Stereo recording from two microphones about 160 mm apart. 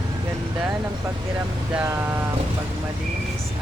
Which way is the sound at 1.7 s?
10° right (ahead or behind).